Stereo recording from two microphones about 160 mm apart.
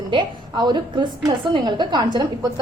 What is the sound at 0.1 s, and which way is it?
A woman's voice, 30° right (ahead or behind).